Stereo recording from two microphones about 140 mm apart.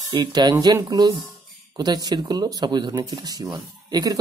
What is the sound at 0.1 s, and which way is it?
Speech, 30° right (ahead or behind).